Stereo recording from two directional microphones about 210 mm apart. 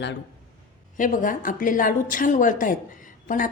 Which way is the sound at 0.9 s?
40° left (ahead or behind).